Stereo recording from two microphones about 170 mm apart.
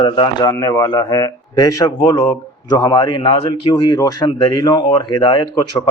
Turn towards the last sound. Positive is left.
turn(degrees=25)  # may be behind; listen again after turning